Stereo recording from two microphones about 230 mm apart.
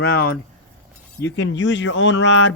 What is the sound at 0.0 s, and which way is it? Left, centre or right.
Speech, left.